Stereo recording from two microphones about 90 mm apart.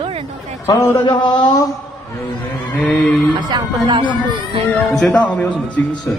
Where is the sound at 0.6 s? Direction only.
30° left (ahead or behind).